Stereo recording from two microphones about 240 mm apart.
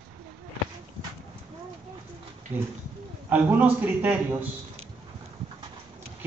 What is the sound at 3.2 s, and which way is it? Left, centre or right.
A woman's voice, centre.